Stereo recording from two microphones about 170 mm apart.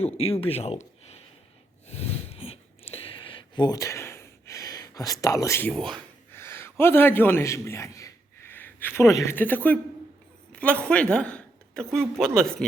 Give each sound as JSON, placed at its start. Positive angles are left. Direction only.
{"t": 0.0, "sound": "speech", "side_deg": 35}
{"t": 1.9, "sound": "a sound", "side_deg": 35}
{"t": 5.2, "sound": "speech", "side_deg": 20}
{"t": 5.7, "sound": "speech", "side_deg": 5}
{"t": 6.3, "sound": "a man's voice", "side_deg": 15}